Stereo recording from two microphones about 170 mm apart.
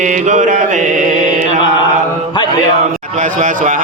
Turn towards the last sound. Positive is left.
turn(degrees=-45)  # may be behind; listen again after turning